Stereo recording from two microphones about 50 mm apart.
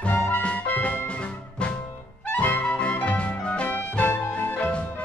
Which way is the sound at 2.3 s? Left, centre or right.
Left.